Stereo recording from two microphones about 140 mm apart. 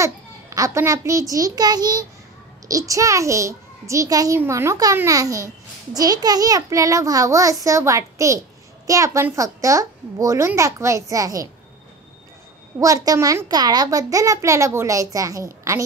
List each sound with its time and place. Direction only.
0.0 s a child's voice: 25° right (ahead or behind)
12.7 s a child's voice: 25° right (ahead or behind)